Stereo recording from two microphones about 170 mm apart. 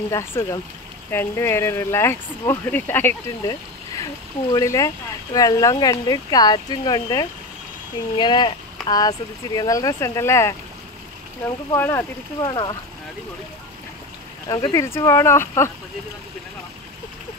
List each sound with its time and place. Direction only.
0.1 s speech: 15° left (ahead or behind)
11.7 s speech: 15° left (ahead or behind)
12.4 s speech: 25° left (ahead or behind)
14.5 s speech: 20° left (ahead or behind)